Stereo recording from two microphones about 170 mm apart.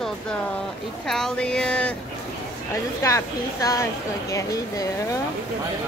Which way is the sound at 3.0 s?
20° left (ahead or behind).